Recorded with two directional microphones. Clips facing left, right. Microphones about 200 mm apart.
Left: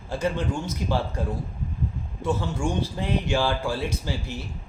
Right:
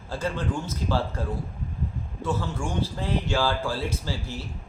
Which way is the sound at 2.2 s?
15° left (ahead or behind).